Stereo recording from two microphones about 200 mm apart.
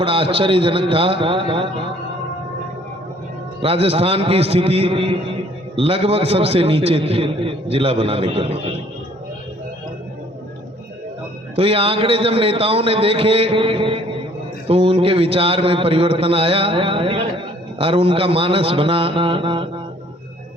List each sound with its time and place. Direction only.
0.0 s a man's voice: 25° right (ahead or behind)
3.6 s a man's voice: 30° right (ahead or behind)
11.5 s a man's voice: 30° right (ahead or behind)